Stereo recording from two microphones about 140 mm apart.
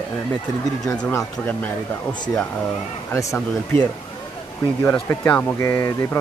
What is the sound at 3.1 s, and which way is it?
Speech, 20° left (ahead or behind).